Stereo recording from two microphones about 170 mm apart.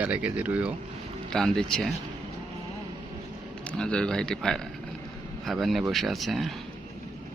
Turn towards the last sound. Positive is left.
turn(degrees=0)  # may be behind; listen again after turning